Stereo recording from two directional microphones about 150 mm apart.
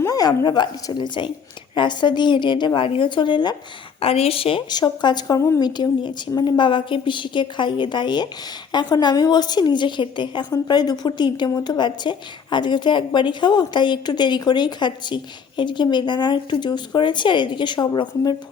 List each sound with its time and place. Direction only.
0.0 s a woman's voice: 25° left (ahead or behind)